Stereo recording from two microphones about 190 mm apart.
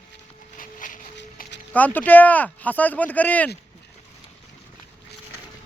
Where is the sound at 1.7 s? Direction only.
10° left (ahead or behind).